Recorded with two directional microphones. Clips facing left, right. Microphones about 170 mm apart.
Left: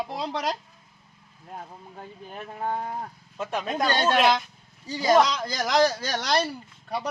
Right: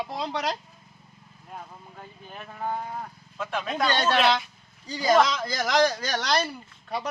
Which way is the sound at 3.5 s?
40° left (ahead or behind).